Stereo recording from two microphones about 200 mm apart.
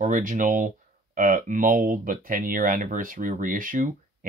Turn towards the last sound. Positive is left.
turn(degrees=-45)  # may be behind; listen again after turning